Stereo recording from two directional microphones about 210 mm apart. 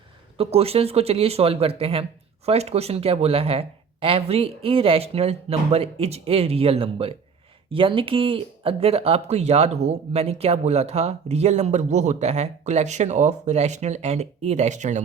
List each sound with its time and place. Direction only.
0.3 s speech: 30° right (ahead or behind)